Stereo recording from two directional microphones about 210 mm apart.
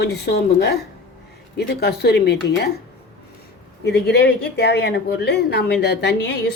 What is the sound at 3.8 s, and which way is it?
Speech, 50° left (ahead or behind).